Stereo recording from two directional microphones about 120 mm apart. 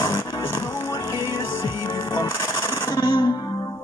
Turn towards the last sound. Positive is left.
turn(degrees=40)  # may be behind; listen again after turning